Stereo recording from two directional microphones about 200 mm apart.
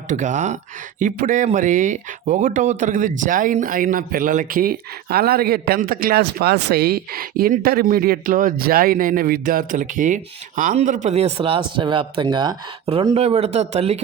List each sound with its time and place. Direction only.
0.1 s speech: 40° right (ahead or behind)